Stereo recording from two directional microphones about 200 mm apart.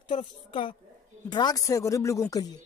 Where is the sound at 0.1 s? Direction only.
30° left (ahead or behind).